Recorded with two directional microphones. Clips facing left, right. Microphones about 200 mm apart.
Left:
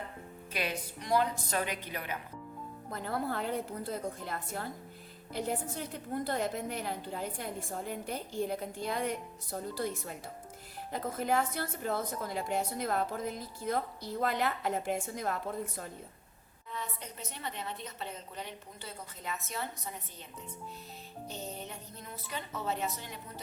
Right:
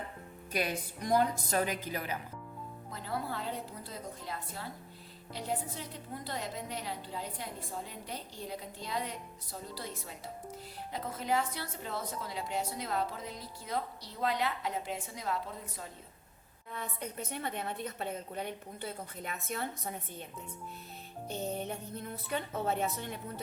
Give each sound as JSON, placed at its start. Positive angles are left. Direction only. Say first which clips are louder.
{"t": 0.5, "sound": "a woman's voice", "louder": "right 2 dB", "side_deg": -45}
{"t": 2.9, "sound": "a woman's voice", "louder": "left 3 dB", "side_deg": 55}
{"t": 16.7, "sound": "a woman's voice", "louder": "right 2 dB", "side_deg": -55}
{"t": 21.5, "sound": "a woman's voice", "louder": "right 6 dB", "side_deg": -55}